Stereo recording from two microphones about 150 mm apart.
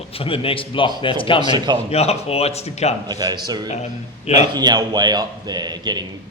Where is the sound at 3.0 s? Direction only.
25° right (ahead or behind).